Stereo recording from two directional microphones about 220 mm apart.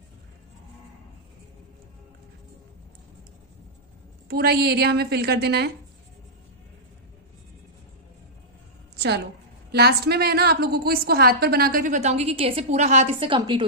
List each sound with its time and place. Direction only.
4.3 s a woman's voice: 45° right (ahead or behind)
8.9 s a sound: 50° right (ahead or behind)
9.7 s a woman's voice: 45° right (ahead or behind); by 13.7 s 20° right (ahead or behind)